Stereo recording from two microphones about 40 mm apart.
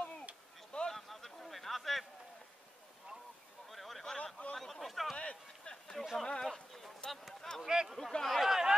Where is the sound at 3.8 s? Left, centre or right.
Centre.